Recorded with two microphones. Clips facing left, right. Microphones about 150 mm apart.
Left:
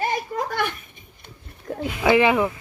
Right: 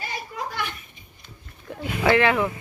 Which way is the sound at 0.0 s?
55° left (ahead or behind).